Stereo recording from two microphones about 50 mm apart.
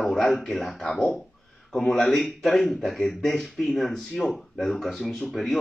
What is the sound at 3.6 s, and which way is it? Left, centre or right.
Speech, centre.